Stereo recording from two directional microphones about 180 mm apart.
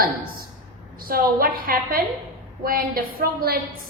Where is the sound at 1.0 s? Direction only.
55° right (ahead or behind).